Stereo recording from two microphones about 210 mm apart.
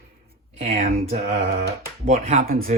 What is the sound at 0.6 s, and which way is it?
Speech, 30° right (ahead or behind).